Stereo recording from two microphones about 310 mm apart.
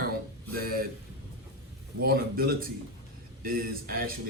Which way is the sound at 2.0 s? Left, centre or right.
Right.